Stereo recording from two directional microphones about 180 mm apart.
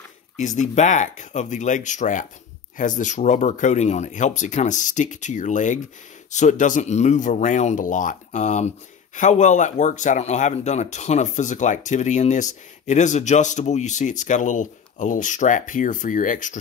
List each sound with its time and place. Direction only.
0.4 s speech: 40° left (ahead or behind)